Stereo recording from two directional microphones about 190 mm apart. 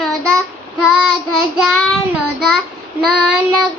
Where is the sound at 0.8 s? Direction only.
5° right (ahead or behind).